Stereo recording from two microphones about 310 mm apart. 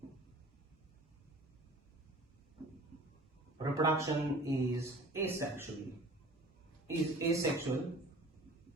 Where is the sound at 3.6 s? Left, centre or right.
Centre.